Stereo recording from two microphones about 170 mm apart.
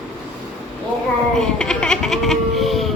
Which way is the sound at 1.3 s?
5° left (ahead or behind).